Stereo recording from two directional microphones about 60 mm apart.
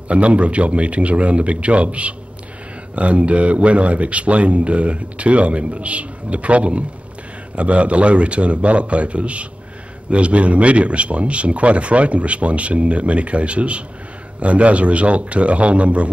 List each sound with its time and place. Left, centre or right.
0.1 s speech: right